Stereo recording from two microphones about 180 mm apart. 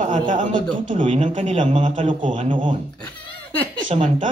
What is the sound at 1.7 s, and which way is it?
A man's voice, 30° right (ahead or behind).